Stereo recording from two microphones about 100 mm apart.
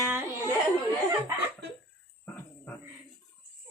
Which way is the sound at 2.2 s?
15° left (ahead or behind).